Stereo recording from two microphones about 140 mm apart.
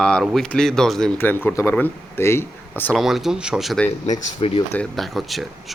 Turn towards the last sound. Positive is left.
turn(degrees=0)  # may be behind; listen again after turning